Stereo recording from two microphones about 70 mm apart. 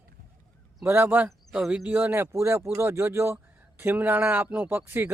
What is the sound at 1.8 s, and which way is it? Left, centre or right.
Speech, right.